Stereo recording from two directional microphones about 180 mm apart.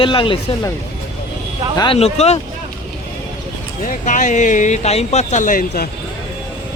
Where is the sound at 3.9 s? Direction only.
45° left (ahead or behind).